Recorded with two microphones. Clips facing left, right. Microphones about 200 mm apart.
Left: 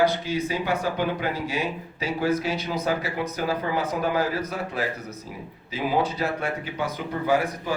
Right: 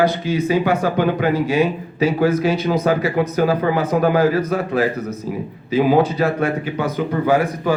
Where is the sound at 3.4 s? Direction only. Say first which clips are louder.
Right 8 dB; 75° right (ahead or behind).